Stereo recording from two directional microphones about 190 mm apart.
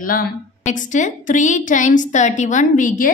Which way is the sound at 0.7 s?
40° left (ahead or behind).